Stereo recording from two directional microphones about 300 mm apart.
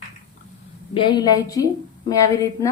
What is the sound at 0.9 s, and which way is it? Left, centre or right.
A woman's voice, centre.